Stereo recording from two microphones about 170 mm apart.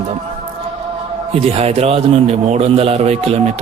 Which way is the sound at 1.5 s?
40° right (ahead or behind).